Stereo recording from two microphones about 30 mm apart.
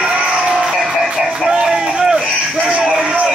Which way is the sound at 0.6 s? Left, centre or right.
Right.